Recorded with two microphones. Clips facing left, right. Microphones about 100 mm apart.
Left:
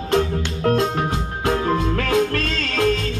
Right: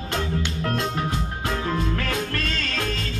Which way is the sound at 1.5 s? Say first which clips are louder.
Left 7 dB; 55° left (ahead or behind).